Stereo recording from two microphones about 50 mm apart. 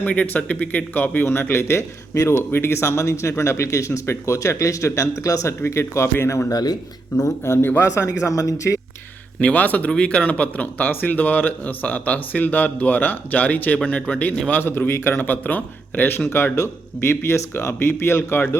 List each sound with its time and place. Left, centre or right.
0.0 s speech: left
0.9 s speech: left
1.2 s a man's voice: left
7.3 s a man's voice: left
7.9 s speech: left
9.4 s speech: left
14.5 s a man's voice: left
16.3 s a man's voice: left